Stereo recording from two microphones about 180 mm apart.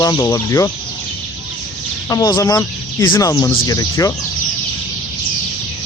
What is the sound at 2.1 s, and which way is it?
Speech, 20° left (ahead or behind).